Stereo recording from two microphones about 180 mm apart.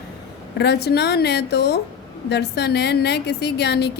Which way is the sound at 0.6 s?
65° left (ahead or behind).